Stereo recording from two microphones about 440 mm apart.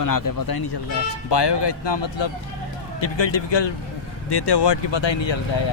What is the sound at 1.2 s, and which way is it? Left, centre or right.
Speech, left.